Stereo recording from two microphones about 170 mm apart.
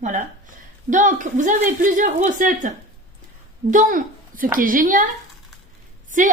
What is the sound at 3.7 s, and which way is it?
Speech, 50° right (ahead or behind).